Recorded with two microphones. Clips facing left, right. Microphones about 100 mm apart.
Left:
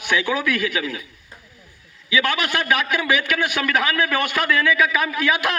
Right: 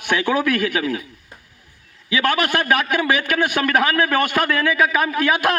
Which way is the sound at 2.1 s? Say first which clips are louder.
Right 2 dB; 45° right (ahead or behind).